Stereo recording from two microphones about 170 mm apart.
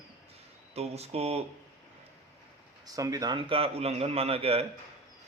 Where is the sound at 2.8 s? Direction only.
20° right (ahead or behind).